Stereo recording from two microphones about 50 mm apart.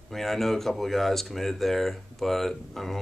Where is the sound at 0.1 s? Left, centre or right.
Centre.